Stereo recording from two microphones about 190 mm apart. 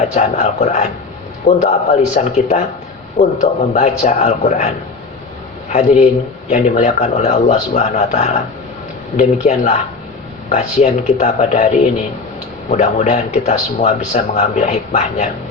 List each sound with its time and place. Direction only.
0.1 s speech: 40° left (ahead or behind)
6.5 s speech: 40° left (ahead or behind)